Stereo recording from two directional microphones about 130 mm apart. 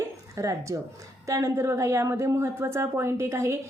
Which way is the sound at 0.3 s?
25° right (ahead or behind).